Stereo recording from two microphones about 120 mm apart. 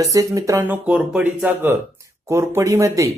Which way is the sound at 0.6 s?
15° right (ahead or behind).